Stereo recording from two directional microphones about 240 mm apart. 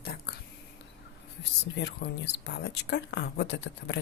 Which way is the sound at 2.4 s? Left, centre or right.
Left.